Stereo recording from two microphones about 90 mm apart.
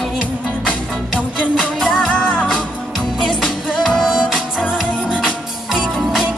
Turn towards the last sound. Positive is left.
turn(degrees=0)  # may be behind; listen again after turning